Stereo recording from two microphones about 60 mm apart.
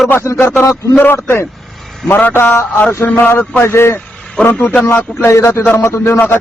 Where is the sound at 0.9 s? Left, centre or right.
Left.